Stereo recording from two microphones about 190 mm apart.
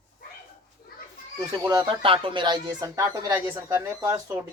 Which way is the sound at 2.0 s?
25° right (ahead or behind).